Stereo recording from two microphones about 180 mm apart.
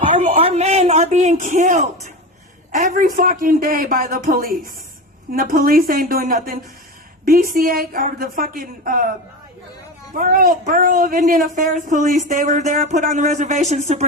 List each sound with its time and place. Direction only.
0.0 s a sound: 30° right (ahead or behind)
2.7 s a woman's voice: 50° right (ahead or behind)
10.2 s a woman's voice: 50° right (ahead or behind)